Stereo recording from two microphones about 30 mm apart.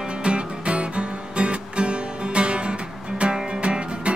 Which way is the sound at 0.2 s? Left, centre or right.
Right.